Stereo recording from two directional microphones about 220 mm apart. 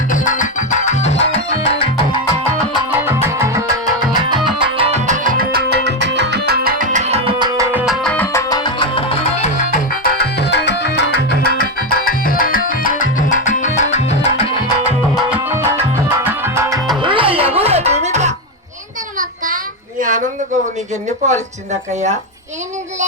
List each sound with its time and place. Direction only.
0.1 s music: 35° left (ahead or behind)
3.0 s music: 10° right (ahead or behind)
4.6 s music: 25° right (ahead or behind); by 7.9 s 5° right (ahead or behind)
8.0 s music: 5° left (ahead or behind); by 14.4 s 30° left (ahead or behind)
15.1 s music: 10° right (ahead or behind); by 18.3 s 30° right (ahead or behind)
20.0 s a sound: 35° right (ahead or behind)
21.2 s speech: 30° right (ahead or behind)